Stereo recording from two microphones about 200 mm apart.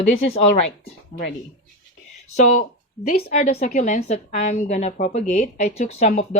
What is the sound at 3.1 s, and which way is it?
Speech, 50° left (ahead or behind).